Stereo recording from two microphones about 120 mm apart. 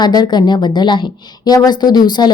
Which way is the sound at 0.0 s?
35° left (ahead or behind).